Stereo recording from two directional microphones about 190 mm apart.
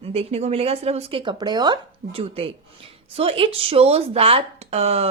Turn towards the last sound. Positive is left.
turn(degrees=-30)  # may be behind; listen again after turning